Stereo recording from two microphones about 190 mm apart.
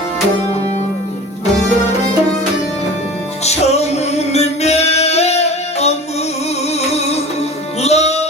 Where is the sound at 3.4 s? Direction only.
35° left (ahead or behind).